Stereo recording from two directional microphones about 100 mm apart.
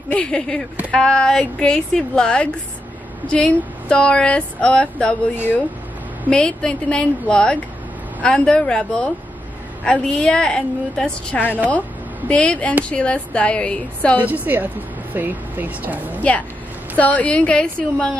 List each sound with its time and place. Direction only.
0.1 s speech: 10° left (ahead or behind)
5.3 s speech: 20° left (ahead or behind)
6.3 s speech: 10° left (ahead or behind)
14.2 s a woman's voice: 15° right (ahead or behind)
16.2 s speech: 15° left (ahead or behind)